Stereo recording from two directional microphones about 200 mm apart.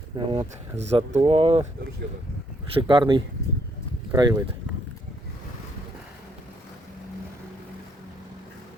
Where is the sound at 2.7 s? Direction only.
25° right (ahead or behind).